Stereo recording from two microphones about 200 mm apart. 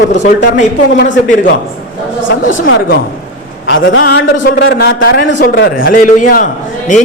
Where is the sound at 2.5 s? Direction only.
75° left (ahead or behind).